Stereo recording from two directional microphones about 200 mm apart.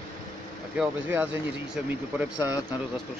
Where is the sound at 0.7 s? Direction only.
5° right (ahead or behind).